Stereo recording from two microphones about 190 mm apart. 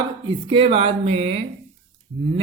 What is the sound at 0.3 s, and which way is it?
Speech, 25° right (ahead or behind).